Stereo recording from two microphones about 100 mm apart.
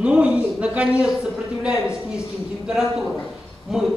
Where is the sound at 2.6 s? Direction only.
5° right (ahead or behind).